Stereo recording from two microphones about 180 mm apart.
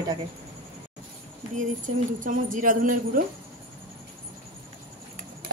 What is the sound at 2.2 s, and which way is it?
Speech, 45° right (ahead or behind).